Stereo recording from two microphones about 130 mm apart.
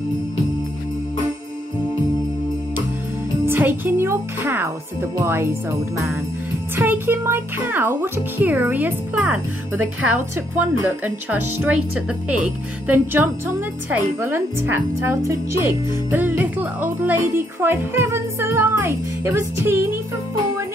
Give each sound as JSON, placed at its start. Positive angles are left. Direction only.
{"t": 3.4, "sound": "speech", "side_deg": -15}